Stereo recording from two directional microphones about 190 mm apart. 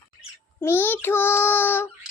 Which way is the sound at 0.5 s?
10° left (ahead or behind).